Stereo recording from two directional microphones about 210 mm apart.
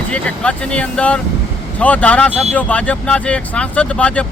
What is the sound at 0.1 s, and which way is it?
Speech, 5° left (ahead or behind).